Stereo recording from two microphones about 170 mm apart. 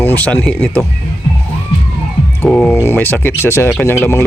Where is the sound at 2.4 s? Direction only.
5° left (ahead or behind).